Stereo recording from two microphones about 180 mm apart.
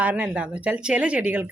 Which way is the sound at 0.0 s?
5° right (ahead or behind).